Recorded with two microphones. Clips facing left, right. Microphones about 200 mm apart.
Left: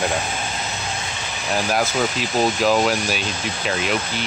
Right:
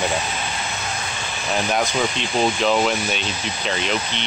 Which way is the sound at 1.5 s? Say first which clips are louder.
Left 1 dB; 5° left (ahead or behind).